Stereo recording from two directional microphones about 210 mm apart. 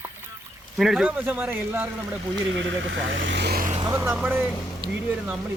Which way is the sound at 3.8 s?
15° right (ahead or behind).